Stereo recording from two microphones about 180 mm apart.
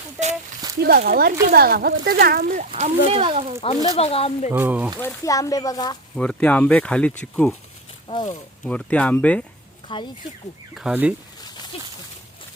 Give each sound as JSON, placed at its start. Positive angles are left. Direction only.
{"t": 0.8, "sound": "speech", "side_deg": -60}
{"t": 3.9, "sound": "speech", "side_deg": 35}
{"t": 4.5, "sound": "speech", "side_deg": -10}
{"t": 4.9, "sound": "speech", "side_deg": 15}
{"t": 6.1, "sound": "speech", "side_deg": 5}
{"t": 8.1, "sound": "speech", "side_deg": 30}
{"t": 8.6, "sound": "speech", "side_deg": 5}
{"t": 9.9, "sound": "speech", "side_deg": 30}
{"t": 10.8, "sound": "speech", "side_deg": -5}
{"t": 11.7, "sound": "speech", "side_deg": 30}